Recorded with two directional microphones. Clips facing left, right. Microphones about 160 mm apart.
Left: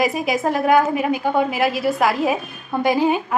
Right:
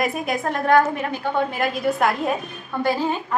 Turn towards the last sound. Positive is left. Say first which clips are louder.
# left 4 dB
turn(degrees=15)  # may be behind; listen again after turning